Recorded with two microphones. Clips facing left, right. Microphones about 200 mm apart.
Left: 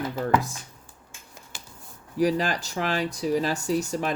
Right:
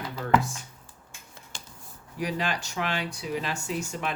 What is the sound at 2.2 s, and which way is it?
Speech, 40° left (ahead or behind).